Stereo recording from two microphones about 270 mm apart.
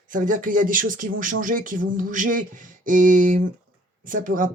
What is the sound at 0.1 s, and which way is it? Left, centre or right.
Speech, right.